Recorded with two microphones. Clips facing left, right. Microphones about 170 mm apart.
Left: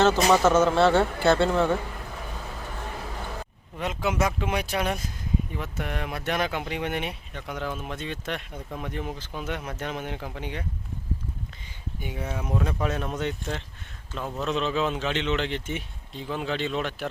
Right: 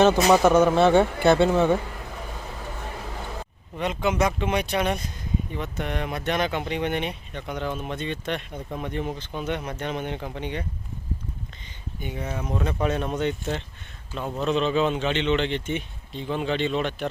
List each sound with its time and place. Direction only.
0.0 s speech: 15° right (ahead or behind)
3.8 s speech: 5° left (ahead or behind)
11.9 s speech: 5° left (ahead or behind)